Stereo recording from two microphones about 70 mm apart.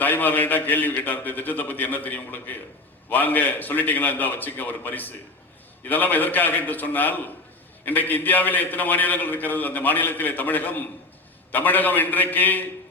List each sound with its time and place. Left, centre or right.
0.0 s a man's voice: left